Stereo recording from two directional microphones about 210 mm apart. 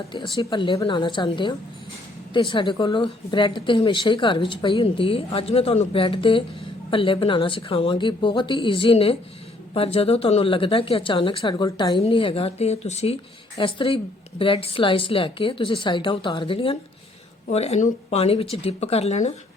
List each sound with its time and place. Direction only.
0.1 s a woman's voice: 20° left (ahead or behind)